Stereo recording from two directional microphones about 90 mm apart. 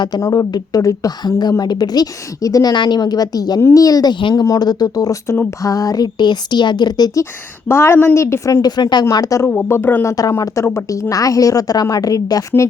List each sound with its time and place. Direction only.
0.2 s a woman's voice: 40° left (ahead or behind)
4.2 s speech: 60° left (ahead or behind)
4.4 s a woman's voice: 45° left (ahead or behind)
7.7 s speech: 25° left (ahead or behind)
8.6 s a woman's voice: 50° left (ahead or behind)
9.5 s speech: 25° left (ahead or behind)
10.1 s a woman's voice: 40° left (ahead or behind)